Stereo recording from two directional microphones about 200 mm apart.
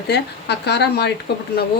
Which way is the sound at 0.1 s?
55° left (ahead or behind).